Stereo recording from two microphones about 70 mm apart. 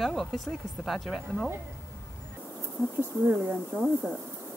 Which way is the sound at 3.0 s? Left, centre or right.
Right.